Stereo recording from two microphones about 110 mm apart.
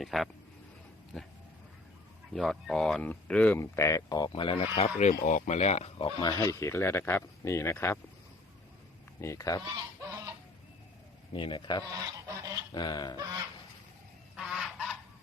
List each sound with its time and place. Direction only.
0.0 s speech: centre (ahead or behind)
2.3 s speech: centre (ahead or behind)
3.6 s speech: 25° left (ahead or behind)
4.3 s speech: 50° left (ahead or behind)
4.9 s speech: 90° left
6.1 s speech: 40° left (ahead or behind); by 7.9 s 25° left (ahead or behind)
9.2 s speech: 30° left (ahead or behind)
9.6 s fowl: 30° right (ahead or behind)
11.3 s speech: 45° left (ahead or behind)
11.9 s goose: 30° right (ahead or behind)
12.7 s goose: 40° left (ahead or behind)
13.1 s fowl: 35° right (ahead or behind)
14.3 s goose: 5° right (ahead or behind)